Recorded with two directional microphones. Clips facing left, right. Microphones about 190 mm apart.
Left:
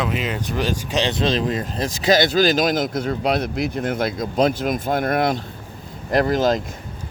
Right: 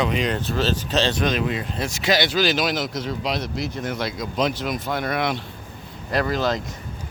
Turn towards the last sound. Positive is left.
turn(degrees=45)  # may be behind; listen again after turning